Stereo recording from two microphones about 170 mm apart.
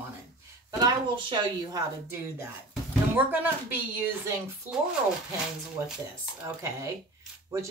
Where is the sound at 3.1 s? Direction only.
10° right (ahead or behind).